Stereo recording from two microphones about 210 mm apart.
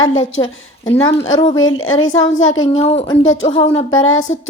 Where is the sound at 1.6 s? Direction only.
75° left (ahead or behind).